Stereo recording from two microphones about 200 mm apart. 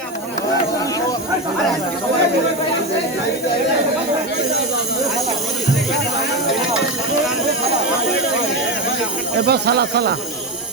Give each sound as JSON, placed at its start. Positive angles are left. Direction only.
{"t": 9.5, "sound": "speech", "side_deg": -55}